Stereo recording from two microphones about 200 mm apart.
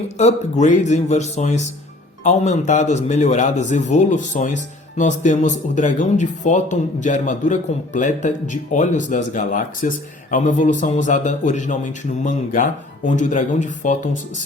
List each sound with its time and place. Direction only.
0.2 s speech: 35° left (ahead or behind)